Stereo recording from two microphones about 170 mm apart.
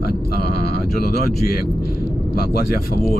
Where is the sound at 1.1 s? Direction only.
65° left (ahead or behind).